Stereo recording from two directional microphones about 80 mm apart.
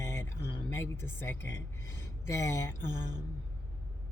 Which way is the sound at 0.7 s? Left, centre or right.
Left.